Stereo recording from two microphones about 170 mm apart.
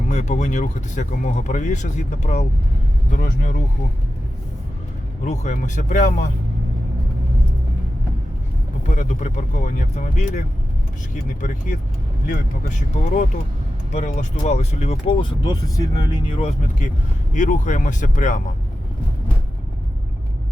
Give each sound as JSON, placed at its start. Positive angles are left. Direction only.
{"t": 0.1, "sound": "speech", "side_deg": 45}
{"t": 5.2, "sound": "speech", "side_deg": 45}
{"t": 8.9, "sound": "speech", "side_deg": 45}